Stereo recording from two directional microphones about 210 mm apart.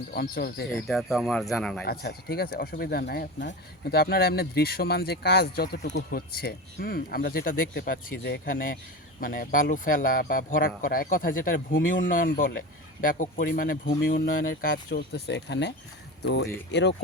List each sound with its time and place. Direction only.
0.1 s speech: 45° left (ahead or behind)
0.9 s speech: centre (ahead or behind)
1.8 s speech: 50° left (ahead or behind)